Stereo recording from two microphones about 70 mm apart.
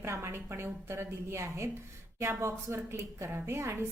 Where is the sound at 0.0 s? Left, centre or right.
Right.